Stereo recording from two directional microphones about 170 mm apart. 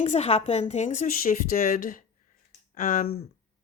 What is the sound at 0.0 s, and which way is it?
Speech, 35° left (ahead or behind).